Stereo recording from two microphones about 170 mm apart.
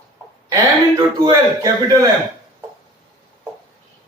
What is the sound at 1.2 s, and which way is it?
Speech, 20° right (ahead or behind).